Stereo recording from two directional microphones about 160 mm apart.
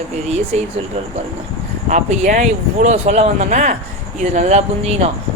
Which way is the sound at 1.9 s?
50° right (ahead or behind).